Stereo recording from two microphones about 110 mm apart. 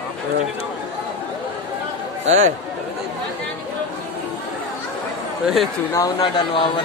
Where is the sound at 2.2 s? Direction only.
90° right.